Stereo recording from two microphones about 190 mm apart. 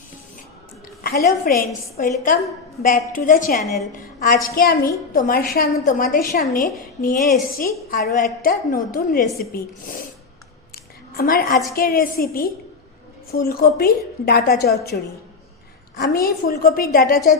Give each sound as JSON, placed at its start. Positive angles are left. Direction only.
{"t": 1.0, "sound": "a woman's voice", "side_deg": 45}
{"t": 11.1, "sound": "a woman's voice", "side_deg": 50}
{"t": 16.0, "sound": "a woman's voice", "side_deg": 50}